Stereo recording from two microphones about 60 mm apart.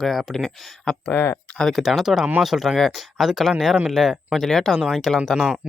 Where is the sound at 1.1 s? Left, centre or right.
Left.